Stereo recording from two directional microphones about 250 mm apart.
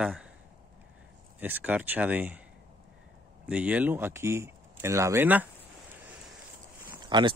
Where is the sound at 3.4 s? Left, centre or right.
Centre.